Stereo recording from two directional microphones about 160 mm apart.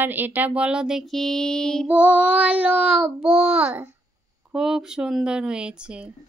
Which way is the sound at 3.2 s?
35° right (ahead or behind).